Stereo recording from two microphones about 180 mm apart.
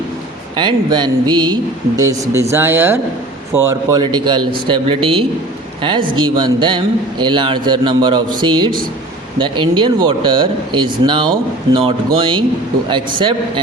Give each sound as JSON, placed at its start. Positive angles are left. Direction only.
{"t": 0.5, "sound": "a man's voice", "side_deg": -25}